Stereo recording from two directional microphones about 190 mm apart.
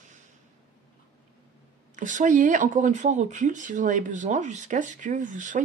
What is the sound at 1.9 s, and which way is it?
Speech, 40° right (ahead or behind).